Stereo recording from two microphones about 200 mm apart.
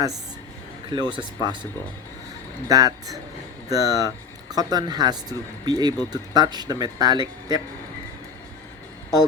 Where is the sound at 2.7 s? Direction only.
20° right (ahead or behind).